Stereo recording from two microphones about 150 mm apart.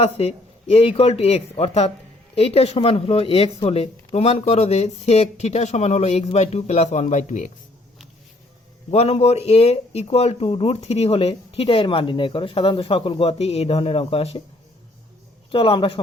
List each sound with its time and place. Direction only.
0.0 s speech: 45° left (ahead or behind)
8.9 s speech: 45° left (ahead or behind)
15.5 s speech: 35° left (ahead or behind)